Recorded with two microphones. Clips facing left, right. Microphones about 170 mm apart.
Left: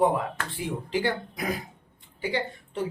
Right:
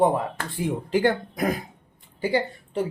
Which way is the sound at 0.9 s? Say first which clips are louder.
Right 6 dB; 50° right (ahead or behind).